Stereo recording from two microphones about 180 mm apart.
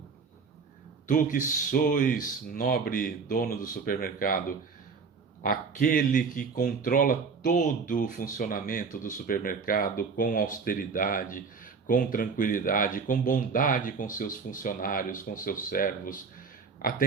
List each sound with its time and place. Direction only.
1.0 s speech: 45° left (ahead or behind)